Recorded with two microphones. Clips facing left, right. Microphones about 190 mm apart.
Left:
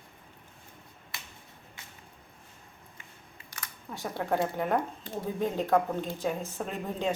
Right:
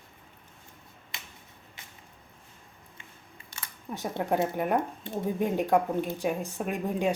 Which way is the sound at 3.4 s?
25° right (ahead or behind).